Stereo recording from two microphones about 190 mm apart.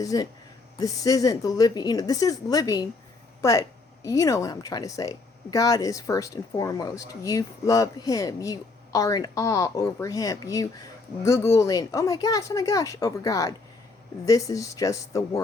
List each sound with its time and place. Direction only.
0.0 s speech: 20° left (ahead or behind)